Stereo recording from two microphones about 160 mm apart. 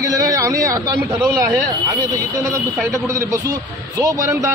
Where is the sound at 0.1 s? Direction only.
20° right (ahead or behind).